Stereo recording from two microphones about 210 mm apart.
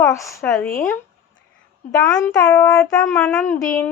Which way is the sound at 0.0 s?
15° left (ahead or behind).